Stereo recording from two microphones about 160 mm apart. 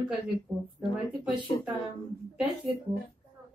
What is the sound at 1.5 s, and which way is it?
Speech, 30° left (ahead or behind).